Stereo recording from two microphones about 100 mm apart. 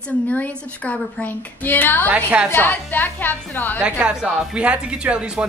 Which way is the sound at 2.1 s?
15° right (ahead or behind).